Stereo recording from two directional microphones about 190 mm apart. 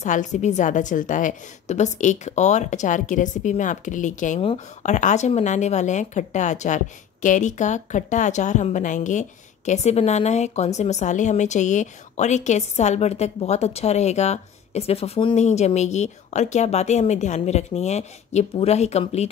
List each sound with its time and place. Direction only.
0.0 s a woman's voice: 40° left (ahead or behind)